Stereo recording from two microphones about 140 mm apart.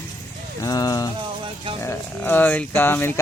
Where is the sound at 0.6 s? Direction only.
25° left (ahead or behind).